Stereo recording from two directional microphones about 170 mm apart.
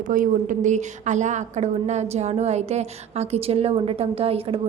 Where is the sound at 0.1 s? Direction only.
50° right (ahead or behind).